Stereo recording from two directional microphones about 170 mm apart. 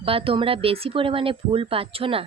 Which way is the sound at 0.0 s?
35° right (ahead or behind).